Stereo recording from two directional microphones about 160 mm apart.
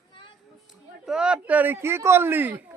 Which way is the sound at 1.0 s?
5° right (ahead or behind).